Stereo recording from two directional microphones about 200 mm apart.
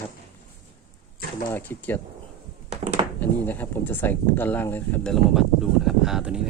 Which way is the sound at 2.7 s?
30° right (ahead or behind).